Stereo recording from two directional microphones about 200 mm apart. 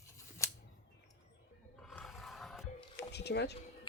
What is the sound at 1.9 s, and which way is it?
Roar, centre (ahead or behind).